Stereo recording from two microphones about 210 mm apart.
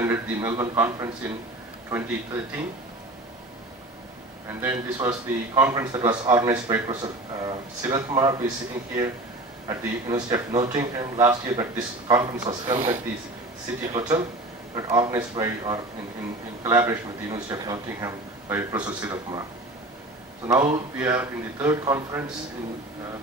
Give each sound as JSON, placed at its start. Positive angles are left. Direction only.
{"t": 0.0, "sound": "a man's voice", "side_deg": -15}
{"t": 4.5, "sound": "a man's voice", "side_deg": -10}
{"t": 4.7, "sound": "a man's voice", "side_deg": -20}
{"t": 9.7, "sound": "a man's voice", "side_deg": -20}
{"t": 10.5, "sound": "speech", "side_deg": -30}
{"t": 10.8, "sound": "a man's voice", "side_deg": -15}
{"t": 20.4, "sound": "a man's voice", "side_deg": -20}
{"t": 21.0, "sound": "a man's voice", "side_deg": -5}